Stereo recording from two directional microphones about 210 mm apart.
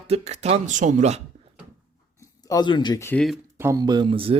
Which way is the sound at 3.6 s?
15° right (ahead or behind).